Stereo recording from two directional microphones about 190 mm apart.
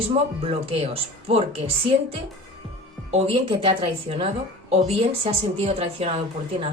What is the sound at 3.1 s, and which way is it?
A woman's voice, 30° right (ahead or behind).